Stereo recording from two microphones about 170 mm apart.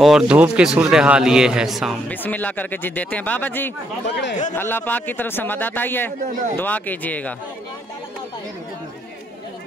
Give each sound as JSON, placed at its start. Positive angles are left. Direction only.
{"t": 0.0, "sound": "a man's voice", "side_deg": -5}
{"t": 4.1, "sound": "speech", "side_deg": 90}
{"t": 4.6, "sound": "a man's voice", "side_deg": 10}